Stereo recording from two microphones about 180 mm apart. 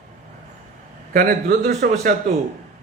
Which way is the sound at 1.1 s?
55° right (ahead or behind).